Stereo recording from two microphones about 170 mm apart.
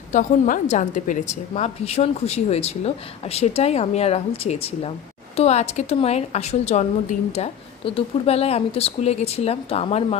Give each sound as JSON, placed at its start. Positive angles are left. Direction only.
{"t": 0.1, "sound": "a woman's voice", "side_deg": 50}